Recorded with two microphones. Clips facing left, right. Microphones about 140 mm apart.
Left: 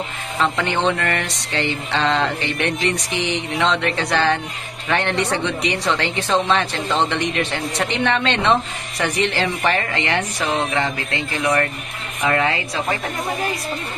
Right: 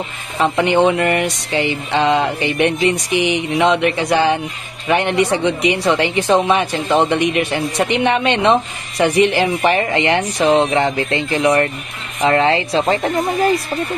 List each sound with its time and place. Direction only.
0.4 s a woman's voice: 15° right (ahead or behind)